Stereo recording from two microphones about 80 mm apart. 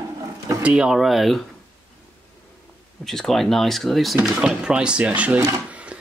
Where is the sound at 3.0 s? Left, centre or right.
Centre.